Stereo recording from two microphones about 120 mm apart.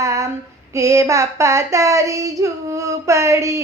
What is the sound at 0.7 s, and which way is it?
Speech, 25° right (ahead or behind).